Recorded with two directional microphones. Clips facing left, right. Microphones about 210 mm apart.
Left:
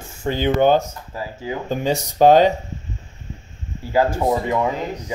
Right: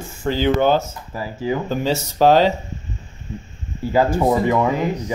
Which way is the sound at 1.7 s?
15° left (ahead or behind).